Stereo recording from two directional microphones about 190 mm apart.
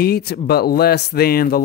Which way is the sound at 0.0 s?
55° left (ahead or behind).